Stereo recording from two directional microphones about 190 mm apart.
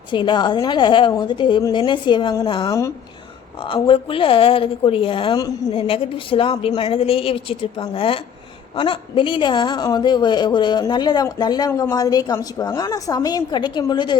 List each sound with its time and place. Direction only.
0.1 s a woman's voice: 25° left (ahead or behind)